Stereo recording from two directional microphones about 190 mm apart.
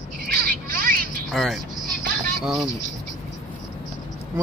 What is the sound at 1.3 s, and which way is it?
Speech, centre (ahead or behind).